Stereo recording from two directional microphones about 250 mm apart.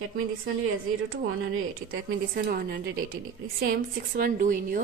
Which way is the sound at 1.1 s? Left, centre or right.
Right.